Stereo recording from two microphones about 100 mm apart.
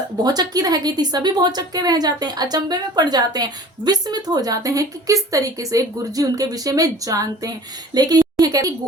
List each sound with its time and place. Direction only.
0.3 s a woman's voice: 40° right (ahead or behind)